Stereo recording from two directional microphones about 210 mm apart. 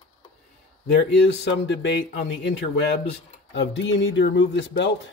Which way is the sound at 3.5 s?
60° left (ahead or behind).